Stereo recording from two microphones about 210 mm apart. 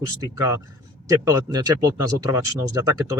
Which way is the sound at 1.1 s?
15° right (ahead or behind).